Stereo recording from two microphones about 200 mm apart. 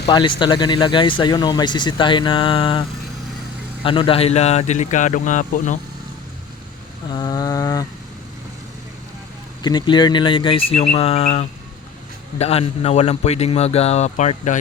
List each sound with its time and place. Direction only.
0.1 s speech: 25° left (ahead or behind)
3.8 s speech: 25° left (ahead or behind)
7.1 s mantra: 20° left (ahead or behind)
9.6 s speech: 20° left (ahead or behind); by 14.6 s 35° left (ahead or behind)